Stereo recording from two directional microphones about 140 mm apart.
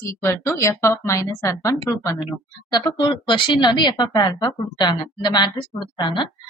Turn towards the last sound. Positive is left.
turn(degrees=35)  # may be behind; listen again after turning